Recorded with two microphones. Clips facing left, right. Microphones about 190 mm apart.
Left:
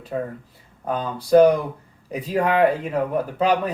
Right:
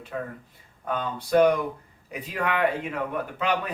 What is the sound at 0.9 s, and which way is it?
Speech, 35° left (ahead or behind).